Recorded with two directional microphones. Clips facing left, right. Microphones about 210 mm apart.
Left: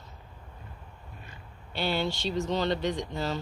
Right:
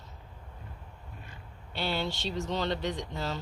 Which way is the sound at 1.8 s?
Centre (ahead or behind).